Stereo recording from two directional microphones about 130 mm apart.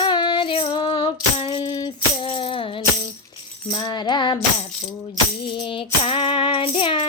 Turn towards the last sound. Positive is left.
turn(degrees=40)  # may be behind; listen again after turning